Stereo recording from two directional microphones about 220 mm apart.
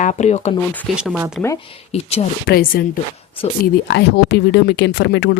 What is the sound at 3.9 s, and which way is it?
Speech, 50° left (ahead or behind).